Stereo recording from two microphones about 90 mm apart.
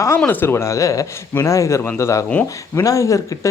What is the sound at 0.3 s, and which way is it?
Speech, 25° left (ahead or behind).